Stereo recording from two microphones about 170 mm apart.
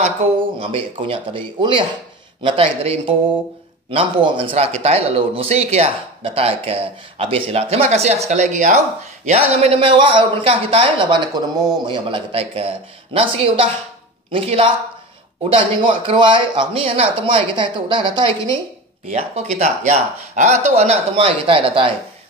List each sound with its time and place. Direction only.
0.6 s speech: 30° right (ahead or behind)
19.0 s speech: 40° right (ahead or behind)